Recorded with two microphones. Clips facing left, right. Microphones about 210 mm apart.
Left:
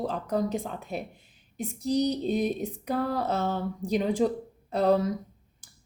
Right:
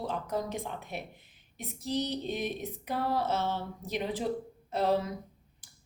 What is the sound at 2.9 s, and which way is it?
Speech, 40° left (ahead or behind).